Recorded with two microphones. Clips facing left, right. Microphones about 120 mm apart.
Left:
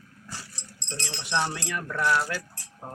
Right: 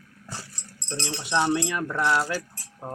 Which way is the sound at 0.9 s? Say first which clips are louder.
Right 3 dB; 25° right (ahead or behind).